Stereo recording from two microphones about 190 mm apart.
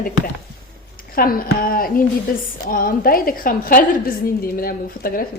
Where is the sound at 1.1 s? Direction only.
50° left (ahead or behind).